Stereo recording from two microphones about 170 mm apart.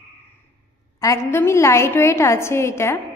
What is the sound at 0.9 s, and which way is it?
A woman's voice, 15° left (ahead or behind).